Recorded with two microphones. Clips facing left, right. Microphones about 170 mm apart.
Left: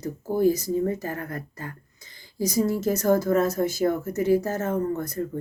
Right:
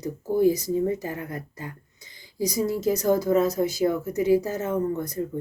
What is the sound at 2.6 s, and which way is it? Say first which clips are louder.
Speech: right 1 dB; 45° left (ahead or behind).